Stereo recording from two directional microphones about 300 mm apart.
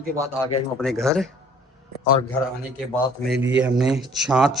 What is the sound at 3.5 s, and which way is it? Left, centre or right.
Speech, centre.